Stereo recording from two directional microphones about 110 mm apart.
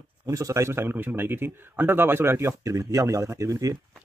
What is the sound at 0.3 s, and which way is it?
Speech, 30° right (ahead or behind).